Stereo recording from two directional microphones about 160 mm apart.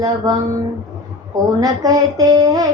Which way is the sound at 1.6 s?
25° right (ahead or behind).